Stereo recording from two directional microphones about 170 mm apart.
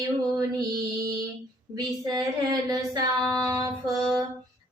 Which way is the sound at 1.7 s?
20° right (ahead or behind).